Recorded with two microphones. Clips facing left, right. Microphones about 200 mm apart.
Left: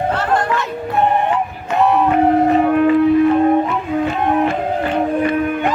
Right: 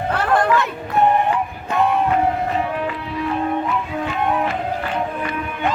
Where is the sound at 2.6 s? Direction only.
55° left (ahead or behind).